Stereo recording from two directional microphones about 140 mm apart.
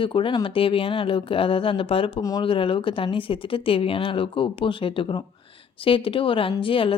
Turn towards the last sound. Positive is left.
turn(degrees=40)  # may be behind; listen again after turning